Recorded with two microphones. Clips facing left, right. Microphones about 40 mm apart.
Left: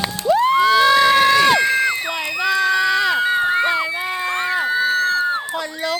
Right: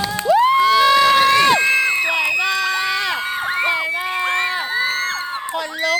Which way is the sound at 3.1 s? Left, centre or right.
Right.